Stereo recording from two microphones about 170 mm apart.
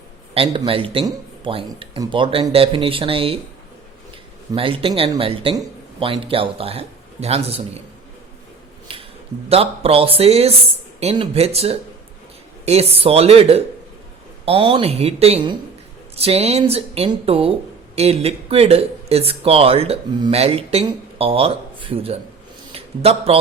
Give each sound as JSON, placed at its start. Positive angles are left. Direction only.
{"t": 0.3, "sound": "speech", "side_deg": -30}
{"t": 4.5, "sound": "speech", "side_deg": -30}
{"t": 8.9, "sound": "a sound", "side_deg": -35}
{"t": 9.5, "sound": "a man's voice", "side_deg": -35}